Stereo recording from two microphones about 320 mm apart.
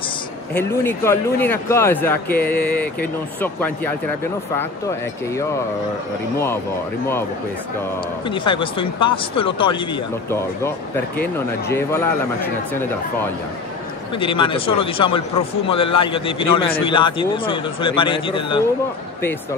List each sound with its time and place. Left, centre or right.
0.6 s a man's voice: centre
8.3 s a man's voice: centre
11.1 s a man's voice: centre
14.1 s a man's voice: centre